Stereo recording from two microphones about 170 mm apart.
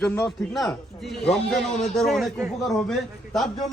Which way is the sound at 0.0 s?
10° left (ahead or behind).